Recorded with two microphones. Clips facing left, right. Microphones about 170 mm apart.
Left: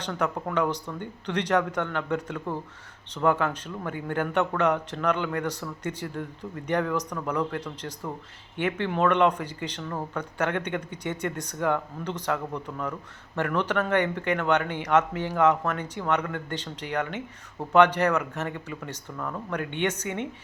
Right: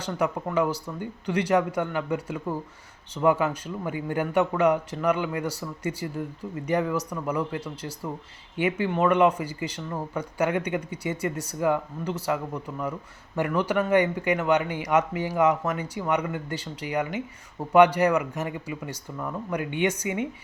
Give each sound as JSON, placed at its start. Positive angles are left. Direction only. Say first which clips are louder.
{"t": 0.0, "sound": "speech", "louder": "right 2 dB", "side_deg": -5}